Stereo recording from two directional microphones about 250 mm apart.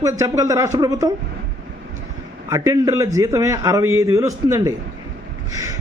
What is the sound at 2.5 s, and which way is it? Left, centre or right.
A man's voice, centre.